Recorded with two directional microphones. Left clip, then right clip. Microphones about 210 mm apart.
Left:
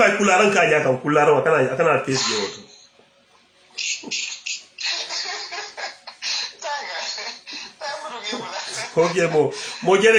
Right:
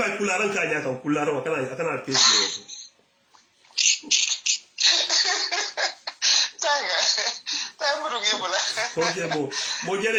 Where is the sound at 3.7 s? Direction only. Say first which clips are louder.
Right 5 dB; 45° right (ahead or behind).